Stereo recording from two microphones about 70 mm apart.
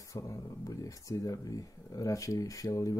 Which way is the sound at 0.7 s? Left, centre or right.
Left.